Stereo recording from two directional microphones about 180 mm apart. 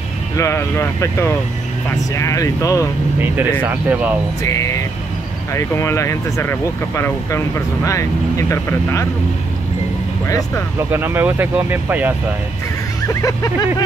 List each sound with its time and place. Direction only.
0.4 s speech: 15° left (ahead or behind)
3.6 s speech: 10° right (ahead or behind)
4.4 s speech: 15° left (ahead or behind)
10.2 s speech: 15° left (ahead or behind)
10.9 s speech: 10° right (ahead or behind)
13.1 s speech: 15° left (ahead or behind)